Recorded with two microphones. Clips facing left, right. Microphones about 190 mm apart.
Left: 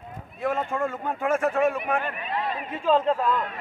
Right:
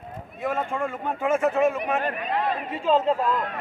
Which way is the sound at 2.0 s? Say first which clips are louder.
Right 4 dB; 40° right (ahead or behind).